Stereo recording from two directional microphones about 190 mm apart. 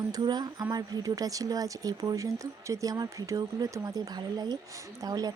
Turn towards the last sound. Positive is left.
turn(degrees=-20)  # may be behind; listen again after turning